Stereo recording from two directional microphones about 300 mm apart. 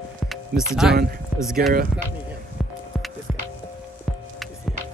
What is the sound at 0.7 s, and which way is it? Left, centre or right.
Speech, centre.